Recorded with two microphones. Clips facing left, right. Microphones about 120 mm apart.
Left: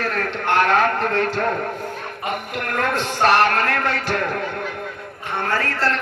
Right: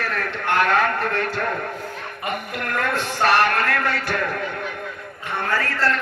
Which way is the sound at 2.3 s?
25° left (ahead or behind).